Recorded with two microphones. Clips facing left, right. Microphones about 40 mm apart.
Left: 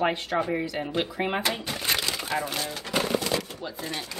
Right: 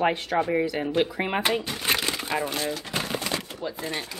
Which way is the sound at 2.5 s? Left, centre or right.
Centre.